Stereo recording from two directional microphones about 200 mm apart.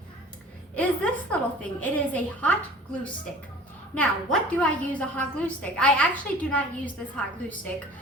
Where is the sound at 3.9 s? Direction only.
5° left (ahead or behind).